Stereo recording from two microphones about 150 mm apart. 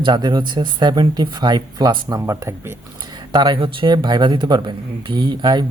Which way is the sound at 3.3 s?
30° right (ahead or behind).